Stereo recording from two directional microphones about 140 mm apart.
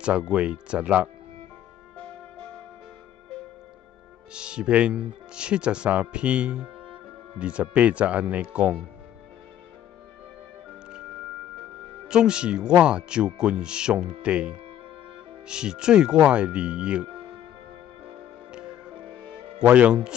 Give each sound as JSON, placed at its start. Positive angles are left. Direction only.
{"t": 0.0, "sound": "speech", "side_deg": -5}
{"t": 4.3, "sound": "speech", "side_deg": -5}
{"t": 12.1, "sound": "speech", "side_deg": -5}
{"t": 18.0, "sound": "music", "side_deg": -5}
{"t": 19.6, "sound": "speech", "side_deg": -10}